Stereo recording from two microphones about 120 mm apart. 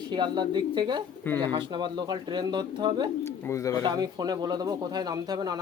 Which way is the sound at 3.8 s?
35° right (ahead or behind).